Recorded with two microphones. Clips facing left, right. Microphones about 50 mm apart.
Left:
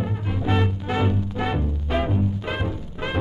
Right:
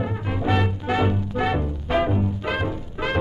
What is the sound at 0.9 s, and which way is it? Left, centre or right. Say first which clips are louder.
Music: right 2 dB; centre.